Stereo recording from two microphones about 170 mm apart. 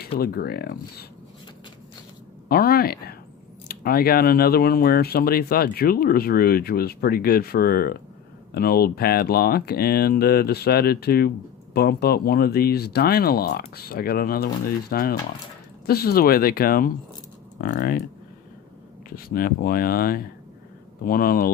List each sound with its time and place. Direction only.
0.2 s speech: 65° left (ahead or behind)
2.5 s speech: 60° left (ahead or behind)
19.1 s speech: 60° left (ahead or behind)